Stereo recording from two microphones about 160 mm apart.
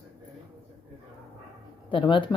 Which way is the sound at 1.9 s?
30° left (ahead or behind).